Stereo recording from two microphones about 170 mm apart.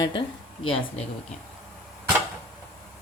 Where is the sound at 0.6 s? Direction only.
30° left (ahead or behind).